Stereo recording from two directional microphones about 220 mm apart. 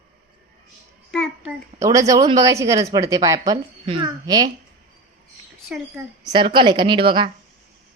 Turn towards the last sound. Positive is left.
turn(degrees=-20)  # may be behind; listen again after turning